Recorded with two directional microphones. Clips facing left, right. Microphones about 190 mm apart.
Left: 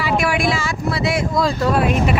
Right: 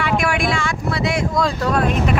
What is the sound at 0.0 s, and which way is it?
Speech, 5° left (ahead or behind).